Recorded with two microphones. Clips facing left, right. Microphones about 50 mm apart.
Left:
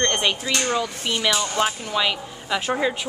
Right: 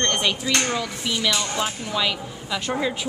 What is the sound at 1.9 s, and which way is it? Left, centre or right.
A woman's voice, centre.